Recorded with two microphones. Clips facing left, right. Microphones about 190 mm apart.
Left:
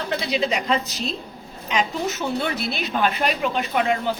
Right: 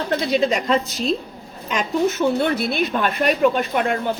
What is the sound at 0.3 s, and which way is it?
A woman's voice, 50° right (ahead or behind).